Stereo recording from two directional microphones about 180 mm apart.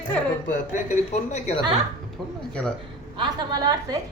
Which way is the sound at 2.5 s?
5° left (ahead or behind).